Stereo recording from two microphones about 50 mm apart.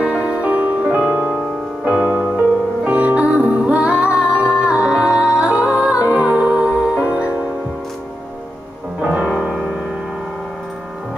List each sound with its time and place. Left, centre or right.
0.0 s music: right
9.3 s music: centre